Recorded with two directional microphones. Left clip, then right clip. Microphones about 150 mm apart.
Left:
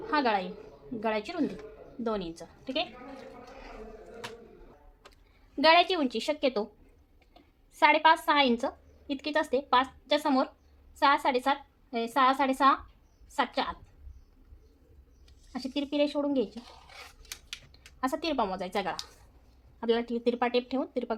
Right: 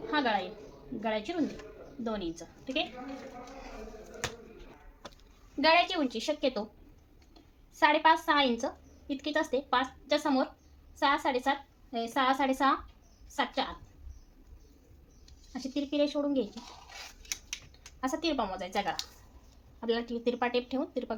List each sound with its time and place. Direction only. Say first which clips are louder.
0.1 s a sound: left 3 dB; 30° left (ahead or behind)
1.0 s a woman's voice: left 2 dB; 30° left (ahead or behind)
5.5 s a woman's voice: left 3 dB; 30° left (ahead or behind)
7.8 s a woman's voice: left 2 dB; 30° left (ahead or behind)
15.5 s a woman's voice: left 1 dB; 25° left (ahead or behind)
18.0 s a woman's voice: left 2 dB; 25° left (ahead or behind)